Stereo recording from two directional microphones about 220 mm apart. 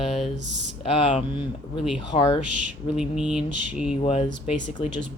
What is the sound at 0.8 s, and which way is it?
Speech, 25° left (ahead or behind).